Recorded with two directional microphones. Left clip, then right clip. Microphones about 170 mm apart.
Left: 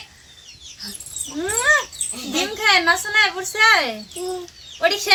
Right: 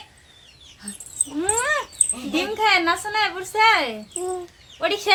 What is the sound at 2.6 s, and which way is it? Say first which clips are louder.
A woman's voice: left 3 dB; 40° right (ahead or behind).